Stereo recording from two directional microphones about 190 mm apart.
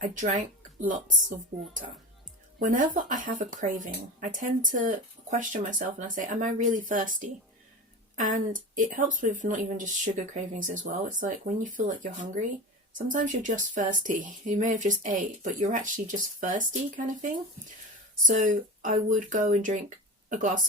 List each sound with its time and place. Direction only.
0.1 s speech: 40° right (ahead or behind)
2.6 s speech: 45° right (ahead or behind)